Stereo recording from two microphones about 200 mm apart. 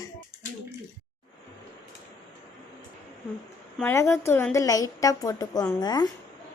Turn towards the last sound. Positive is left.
turn(degrees=20)  # may be behind; listen again after turning